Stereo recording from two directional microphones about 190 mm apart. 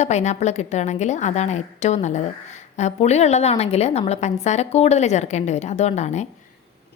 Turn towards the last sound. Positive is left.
turn(degrees=35)  # may be behind; listen again after turning